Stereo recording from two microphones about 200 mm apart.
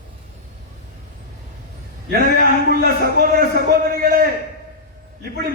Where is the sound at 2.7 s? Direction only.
50° right (ahead or behind).